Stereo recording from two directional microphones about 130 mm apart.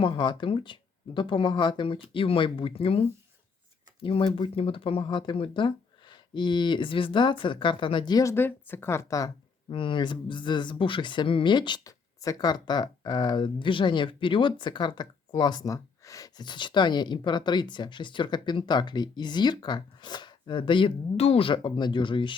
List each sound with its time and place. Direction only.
0.0 s speech: 40° left (ahead or behind)
8.2 s a woman's voice: 20° left (ahead or behind)
9.6 s speech: 40° left (ahead or behind)